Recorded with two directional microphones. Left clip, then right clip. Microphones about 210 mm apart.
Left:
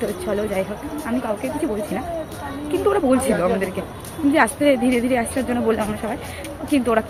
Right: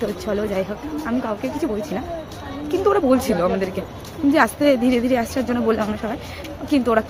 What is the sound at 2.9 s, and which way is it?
A woman's voice, 20° right (ahead or behind).